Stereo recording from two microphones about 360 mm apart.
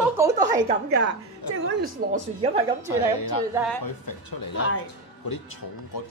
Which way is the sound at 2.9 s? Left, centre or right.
Left.